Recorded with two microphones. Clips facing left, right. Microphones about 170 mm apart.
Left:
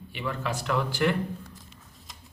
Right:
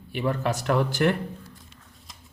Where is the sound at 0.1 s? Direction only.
45° right (ahead or behind).